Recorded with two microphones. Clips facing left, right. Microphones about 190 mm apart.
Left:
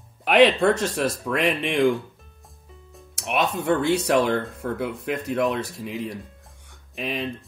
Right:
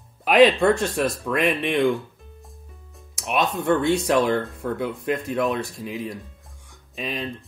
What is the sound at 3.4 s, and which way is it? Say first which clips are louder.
Speech: right 1 dB; 70° left (ahead or behind).